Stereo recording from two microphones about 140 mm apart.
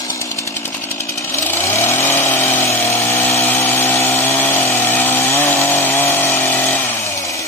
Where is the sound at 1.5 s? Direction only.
15° left (ahead or behind).